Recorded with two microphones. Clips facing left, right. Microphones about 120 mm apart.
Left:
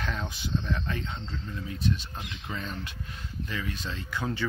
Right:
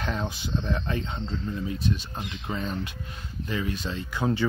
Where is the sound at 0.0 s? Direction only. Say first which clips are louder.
Right 4 dB; 30° right (ahead or behind).